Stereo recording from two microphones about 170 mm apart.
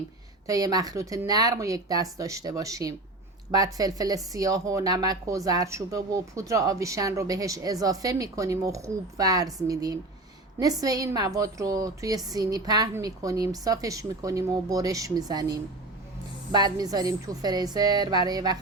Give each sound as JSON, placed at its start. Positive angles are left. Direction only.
{"t": 0.4, "sound": "speech", "side_deg": -20}